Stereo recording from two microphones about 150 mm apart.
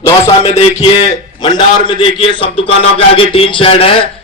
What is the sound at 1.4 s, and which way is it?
A man's voice, 30° left (ahead or behind).